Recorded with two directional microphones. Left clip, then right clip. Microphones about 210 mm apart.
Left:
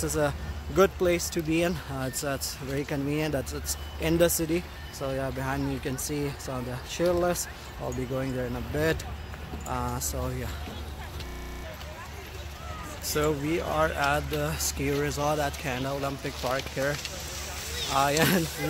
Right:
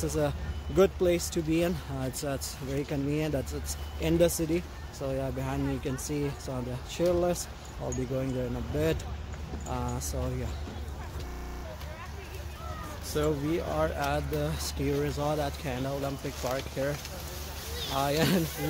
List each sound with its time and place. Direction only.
0.0 s speech: centre (ahead or behind)
13.0 s speech: centre (ahead or behind)
17.9 s speech: 10° left (ahead or behind)